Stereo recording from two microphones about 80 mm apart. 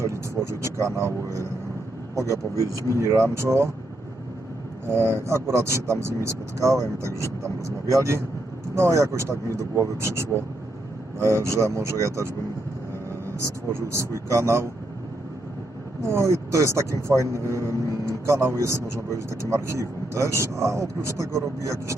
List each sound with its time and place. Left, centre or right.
0.0 s vehicle: right
2.3 s speech: right
4.9 s speech: right
16.0 s speech: right